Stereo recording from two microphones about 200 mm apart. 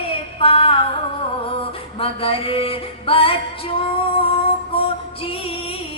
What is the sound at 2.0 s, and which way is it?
Music, 25° left (ahead or behind).